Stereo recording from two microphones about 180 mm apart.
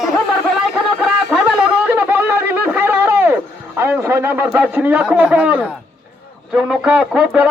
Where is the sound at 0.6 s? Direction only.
Centre (ahead or behind).